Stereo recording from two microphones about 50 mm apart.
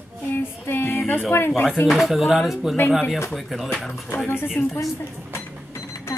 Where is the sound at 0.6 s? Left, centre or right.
Left.